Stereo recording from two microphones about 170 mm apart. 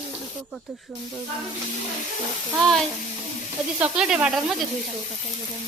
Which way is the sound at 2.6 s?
Centre (ahead or behind).